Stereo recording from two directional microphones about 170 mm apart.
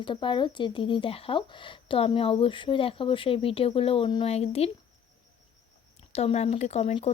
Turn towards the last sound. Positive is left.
turn(degrees=40)  # may be behind; listen again after turning